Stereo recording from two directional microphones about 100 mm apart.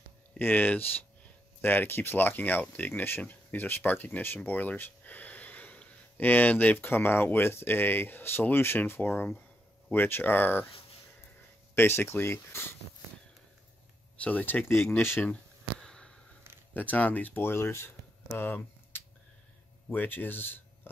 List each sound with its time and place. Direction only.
0.4 s speech: 20° left (ahead or behind)
11.7 s speech: 25° left (ahead or behind)
14.1 s speech: 15° left (ahead or behind)
15.8 s a sound: 5° left (ahead or behind)
16.7 s speech: 15° left (ahead or behind)